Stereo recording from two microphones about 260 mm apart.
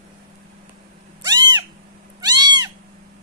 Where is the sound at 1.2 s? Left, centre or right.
Centre.